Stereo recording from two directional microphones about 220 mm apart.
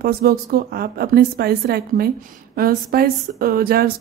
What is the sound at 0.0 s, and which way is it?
A woman's voice, 40° right (ahead or behind).